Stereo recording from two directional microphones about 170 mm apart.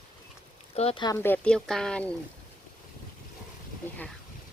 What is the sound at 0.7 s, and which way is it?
Speech, 35° left (ahead or behind).